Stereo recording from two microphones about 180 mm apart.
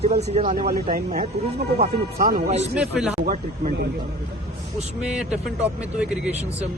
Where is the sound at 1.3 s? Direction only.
65° right (ahead or behind).